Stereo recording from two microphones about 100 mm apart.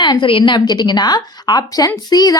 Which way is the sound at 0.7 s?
45° left (ahead or behind).